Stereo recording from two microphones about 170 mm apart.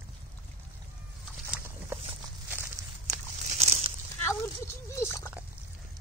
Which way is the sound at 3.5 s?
40° right (ahead or behind).